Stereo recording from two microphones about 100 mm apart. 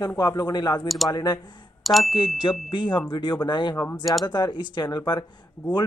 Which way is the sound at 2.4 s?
50° left (ahead or behind).